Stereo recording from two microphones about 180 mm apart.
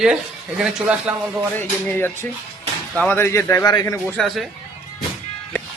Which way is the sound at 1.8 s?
10° left (ahead or behind).